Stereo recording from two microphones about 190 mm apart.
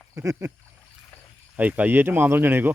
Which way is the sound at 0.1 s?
15° right (ahead or behind).